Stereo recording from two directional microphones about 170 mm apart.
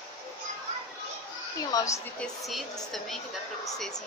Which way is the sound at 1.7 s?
20° left (ahead or behind).